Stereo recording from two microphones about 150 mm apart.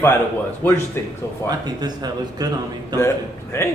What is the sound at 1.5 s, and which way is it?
A man's voice, 25° right (ahead or behind).